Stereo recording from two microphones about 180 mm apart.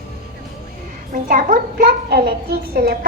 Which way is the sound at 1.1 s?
50° right (ahead or behind).